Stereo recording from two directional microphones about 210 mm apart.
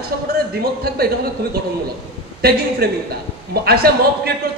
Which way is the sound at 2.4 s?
50° right (ahead or behind).